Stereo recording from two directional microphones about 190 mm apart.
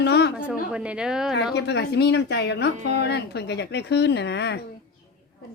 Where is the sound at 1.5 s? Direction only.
60° left (ahead or behind).